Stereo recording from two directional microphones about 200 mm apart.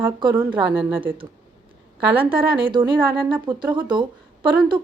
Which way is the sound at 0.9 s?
25° right (ahead or behind).